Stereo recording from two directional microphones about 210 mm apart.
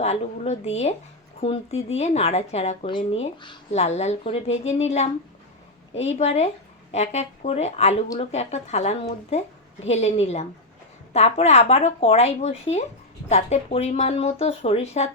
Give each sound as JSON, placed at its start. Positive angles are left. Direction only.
{"t": 0.0, "sound": "speech", "side_deg": 30}